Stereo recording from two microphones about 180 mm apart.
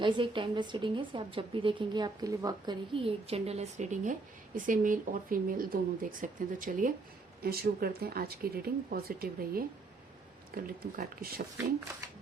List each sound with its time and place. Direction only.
0.0 s a woman's voice: 25° right (ahead or behind); by 6.9 s 45° right (ahead or behind)
7.4 s speech: 60° right (ahead or behind)